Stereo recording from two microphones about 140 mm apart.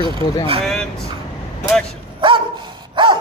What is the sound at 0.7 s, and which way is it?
Speech, 5° left (ahead or behind).